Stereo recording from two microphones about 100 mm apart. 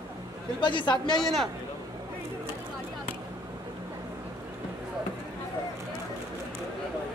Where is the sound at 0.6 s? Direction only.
50° left (ahead or behind).